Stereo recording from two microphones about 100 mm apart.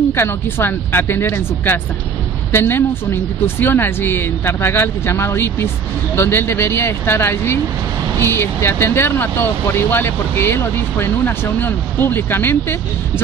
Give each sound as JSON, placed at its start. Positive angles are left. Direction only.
{"t": 0.1, "sound": "speech", "side_deg": 25}